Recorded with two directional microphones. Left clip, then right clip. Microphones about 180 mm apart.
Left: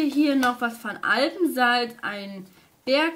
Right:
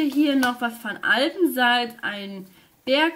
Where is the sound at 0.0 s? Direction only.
Centre (ahead or behind).